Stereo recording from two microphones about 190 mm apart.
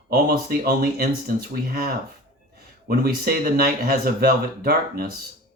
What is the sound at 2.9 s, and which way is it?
Speech, 55° right (ahead or behind).